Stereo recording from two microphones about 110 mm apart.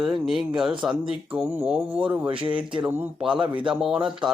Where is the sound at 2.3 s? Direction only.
50° right (ahead or behind).